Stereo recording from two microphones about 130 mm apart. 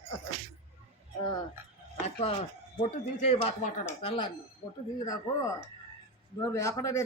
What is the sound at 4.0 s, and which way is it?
Speech, 45° left (ahead or behind).